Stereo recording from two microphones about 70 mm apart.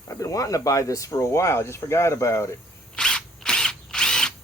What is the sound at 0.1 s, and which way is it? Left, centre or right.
Speech, left.